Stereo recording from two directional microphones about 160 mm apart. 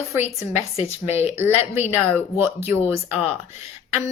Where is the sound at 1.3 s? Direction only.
15° right (ahead or behind).